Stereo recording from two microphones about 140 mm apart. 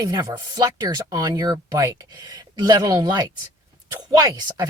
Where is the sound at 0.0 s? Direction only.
25° right (ahead or behind).